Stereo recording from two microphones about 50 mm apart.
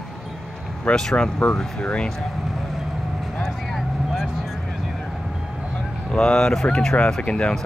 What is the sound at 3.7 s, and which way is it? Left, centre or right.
Vehicle, centre.